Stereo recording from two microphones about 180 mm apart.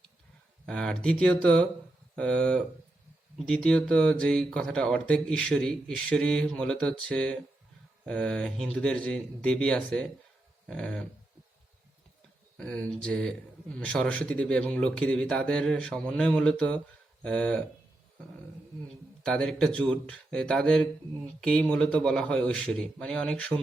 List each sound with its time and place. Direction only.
0.6 s a man's voice: 5° left (ahead or behind)
12.5 s speech: 5° left (ahead or behind)
19.2 s a man's voice: 5° left (ahead or behind)